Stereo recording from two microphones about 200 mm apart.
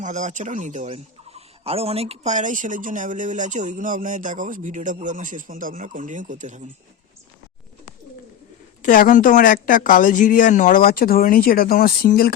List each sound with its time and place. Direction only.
0.0 s speech: 35° right (ahead or behind)
8.8 s speech: 40° left (ahead or behind)